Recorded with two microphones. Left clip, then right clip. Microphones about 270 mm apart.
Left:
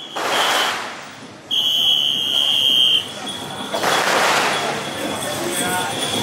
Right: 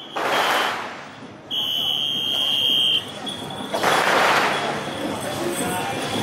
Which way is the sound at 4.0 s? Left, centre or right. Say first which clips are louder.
Left 1 dB; centre.